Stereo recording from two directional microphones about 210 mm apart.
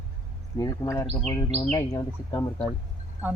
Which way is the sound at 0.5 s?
15° left (ahead or behind).